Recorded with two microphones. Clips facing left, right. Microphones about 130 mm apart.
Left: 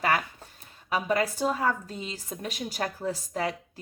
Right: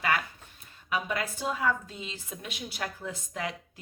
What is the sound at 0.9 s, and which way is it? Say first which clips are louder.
Speech: left 5 dB; 40° left (ahead or behind).